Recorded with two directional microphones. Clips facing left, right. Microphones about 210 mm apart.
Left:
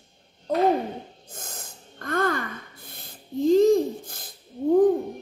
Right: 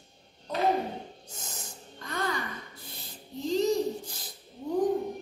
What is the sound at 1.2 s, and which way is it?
Gasp, 55° left (ahead or behind).